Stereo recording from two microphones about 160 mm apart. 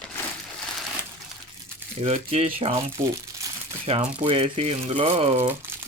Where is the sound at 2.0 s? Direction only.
40° right (ahead or behind).